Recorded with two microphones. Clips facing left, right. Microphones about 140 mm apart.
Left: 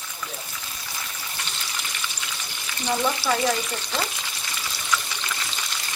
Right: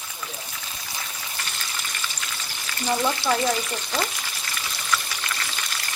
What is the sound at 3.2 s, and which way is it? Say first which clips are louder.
Frying: right 2 dB; 20° right (ahead or behind).